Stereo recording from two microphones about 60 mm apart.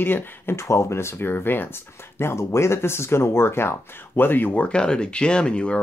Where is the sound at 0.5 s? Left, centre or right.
Left.